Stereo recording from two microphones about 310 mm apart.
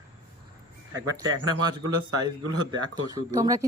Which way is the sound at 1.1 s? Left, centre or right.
Centre.